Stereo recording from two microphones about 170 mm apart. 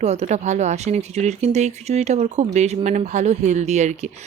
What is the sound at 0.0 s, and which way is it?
Speech, 40° right (ahead or behind).